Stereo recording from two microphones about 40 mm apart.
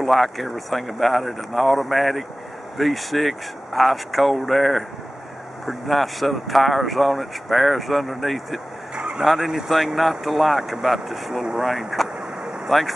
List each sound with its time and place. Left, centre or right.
0.0 s speech: centre
8.9 s a sound: right
9.2 s speech: centre